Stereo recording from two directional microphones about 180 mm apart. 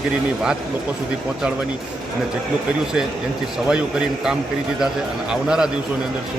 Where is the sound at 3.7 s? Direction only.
5° right (ahead or behind).